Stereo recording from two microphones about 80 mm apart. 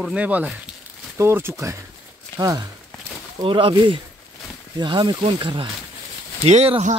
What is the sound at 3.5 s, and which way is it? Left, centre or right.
Speech, right.